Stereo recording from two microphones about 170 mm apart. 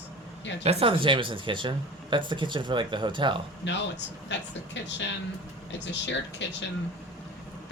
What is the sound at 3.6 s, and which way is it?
A woman's voice, 90° left.